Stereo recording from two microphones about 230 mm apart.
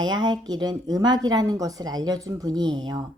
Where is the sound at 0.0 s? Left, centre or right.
Centre.